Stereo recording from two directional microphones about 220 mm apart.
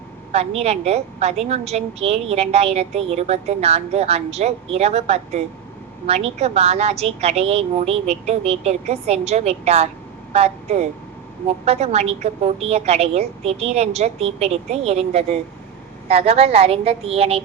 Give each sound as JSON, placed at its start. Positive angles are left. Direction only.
{"t": 0.3, "sound": "a woman's voice", "side_deg": -30}